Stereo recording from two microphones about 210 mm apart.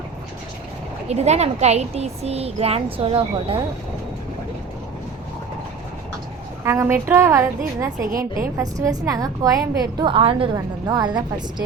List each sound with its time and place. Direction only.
1.0 s speech: 30° right (ahead or behind)
6.7 s speech: 10° right (ahead or behind)
8.1 s a woman's voice: 40° right (ahead or behind)
8.8 s speech: 15° right (ahead or behind)